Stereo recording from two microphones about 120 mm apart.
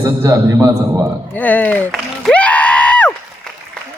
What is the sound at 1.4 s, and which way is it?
Speech, 15° left (ahead or behind).